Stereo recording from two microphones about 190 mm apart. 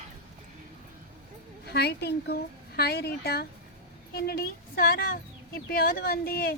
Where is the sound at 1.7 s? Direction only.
60° left (ahead or behind).